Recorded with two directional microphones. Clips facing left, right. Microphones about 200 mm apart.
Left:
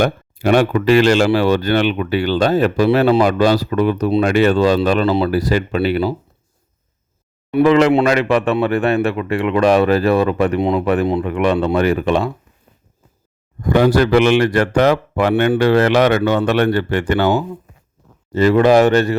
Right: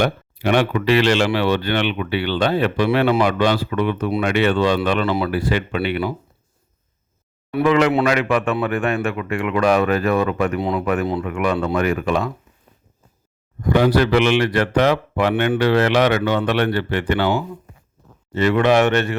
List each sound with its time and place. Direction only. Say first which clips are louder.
0.0 s speech: left 3 dB; 45° left (ahead or behind)
7.6 s speech: left 4 dB; 35° left (ahead or behind)
13.6 s speech: left 3 dB; 45° left (ahead or behind)